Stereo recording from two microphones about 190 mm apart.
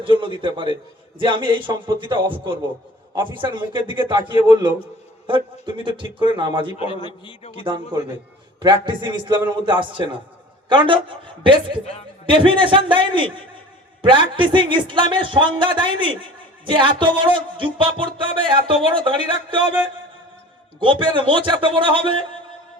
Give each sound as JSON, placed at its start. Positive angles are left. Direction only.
{"t": 0.0, "sound": "music", "side_deg": -25}
{"t": 6.7, "sound": "a man's voice", "side_deg": 25}
{"t": 7.6, "sound": "music", "side_deg": -25}
{"t": 20.7, "sound": "music", "side_deg": -25}